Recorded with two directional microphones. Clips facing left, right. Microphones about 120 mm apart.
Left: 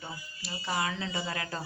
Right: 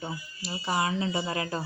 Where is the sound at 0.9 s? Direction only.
40° right (ahead or behind).